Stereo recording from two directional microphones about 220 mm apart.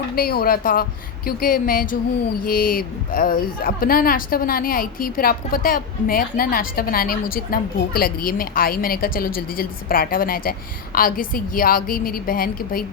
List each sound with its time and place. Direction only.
0.2 s a woman's voice: 40° left (ahead or behind)